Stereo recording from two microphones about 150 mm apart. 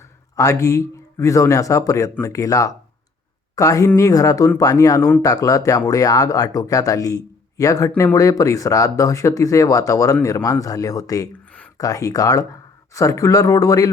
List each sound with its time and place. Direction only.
0.3 s speech: 20° left (ahead or behind)